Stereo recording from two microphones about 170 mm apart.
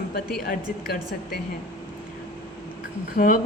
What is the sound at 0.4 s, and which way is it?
Speech, 60° left (ahead or behind).